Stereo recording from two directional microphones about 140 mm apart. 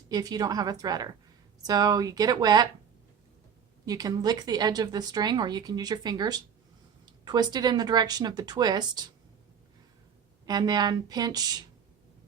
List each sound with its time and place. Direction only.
0.1 s speech: 30° right (ahead or behind)
3.8 s speech: 25° right (ahead or behind)
10.4 s speech: 30° right (ahead or behind)